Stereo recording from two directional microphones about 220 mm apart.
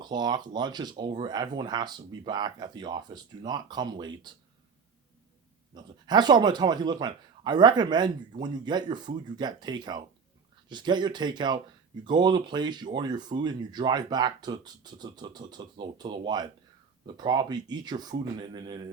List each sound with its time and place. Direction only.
0.0 s speech: 20° right (ahead or behind)
5.7 s speech: 20° right (ahead or behind)